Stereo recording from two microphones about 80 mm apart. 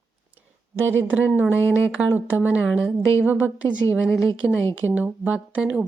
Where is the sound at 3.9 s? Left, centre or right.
Left.